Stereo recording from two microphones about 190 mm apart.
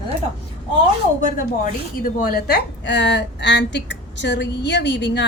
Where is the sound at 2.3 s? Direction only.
55° left (ahead or behind).